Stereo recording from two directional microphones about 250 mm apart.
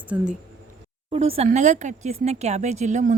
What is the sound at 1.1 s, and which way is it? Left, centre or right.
Speech, right.